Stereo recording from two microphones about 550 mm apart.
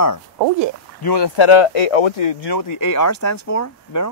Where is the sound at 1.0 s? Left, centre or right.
Left.